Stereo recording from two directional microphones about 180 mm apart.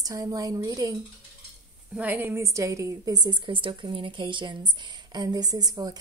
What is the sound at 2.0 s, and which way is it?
A woman's voice, 10° right (ahead or behind).